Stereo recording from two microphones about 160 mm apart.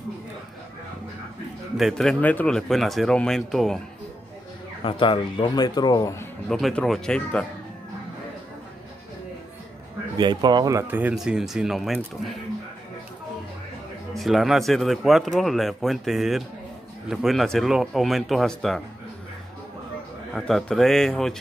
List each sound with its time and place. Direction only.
1.8 s speech: centre (ahead or behind)
4.8 s speech: 35° left (ahead or behind)
6.5 s speech: 5° left (ahead or behind)
10.1 s speech: 25° right (ahead or behind); by 12.3 s centre (ahead or behind)
14.1 s speech: centre (ahead or behind)
20.3 s speech: 5° left (ahead or behind)